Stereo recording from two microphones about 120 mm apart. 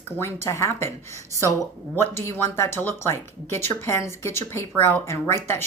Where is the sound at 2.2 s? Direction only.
20° left (ahead or behind).